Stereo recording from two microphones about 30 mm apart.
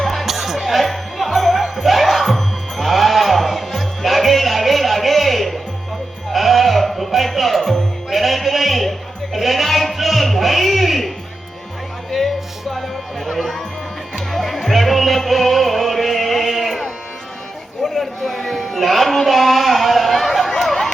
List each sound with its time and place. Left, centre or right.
0.3 s music: centre
8.1 s bleat: centre
9.4 s music: centre
10.0 s a sound: centre
12.1 s music: centre
18.7 s a sound: centre